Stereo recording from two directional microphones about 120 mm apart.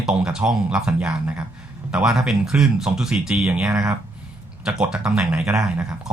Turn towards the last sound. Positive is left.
turn(degrees=-5)  # may be behind; listen again after turning